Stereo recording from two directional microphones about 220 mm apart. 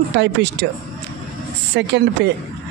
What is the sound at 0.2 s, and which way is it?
Speech, 50° right (ahead or behind).